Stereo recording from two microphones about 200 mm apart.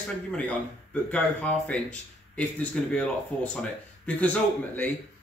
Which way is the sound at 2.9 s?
5° left (ahead or behind).